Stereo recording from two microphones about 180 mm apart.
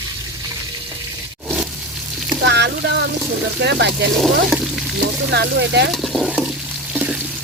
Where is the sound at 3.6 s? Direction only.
70° right (ahead or behind).